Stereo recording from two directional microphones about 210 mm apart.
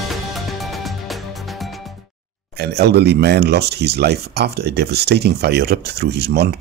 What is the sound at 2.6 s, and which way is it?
Speech, 50° right (ahead or behind).